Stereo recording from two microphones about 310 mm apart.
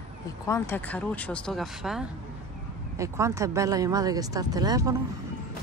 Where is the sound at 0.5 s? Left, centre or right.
Centre.